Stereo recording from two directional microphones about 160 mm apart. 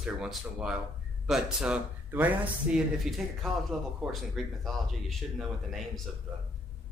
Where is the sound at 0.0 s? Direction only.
5° right (ahead or behind).